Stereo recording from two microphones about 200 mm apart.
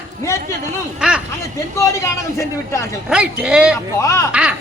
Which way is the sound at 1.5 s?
15° left (ahead or behind).